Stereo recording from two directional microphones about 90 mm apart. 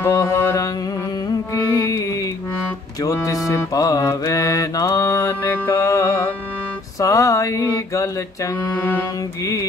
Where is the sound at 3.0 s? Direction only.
40° left (ahead or behind).